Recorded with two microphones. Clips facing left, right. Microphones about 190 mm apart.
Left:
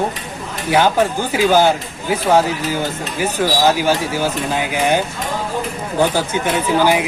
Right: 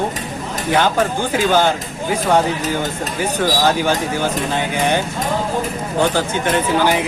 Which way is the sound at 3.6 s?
10° left (ahead or behind).